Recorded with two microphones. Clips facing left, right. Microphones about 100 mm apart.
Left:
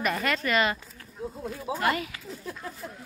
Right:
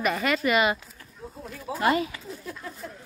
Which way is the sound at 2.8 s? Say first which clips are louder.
Right 2 dB; 15° left (ahead or behind).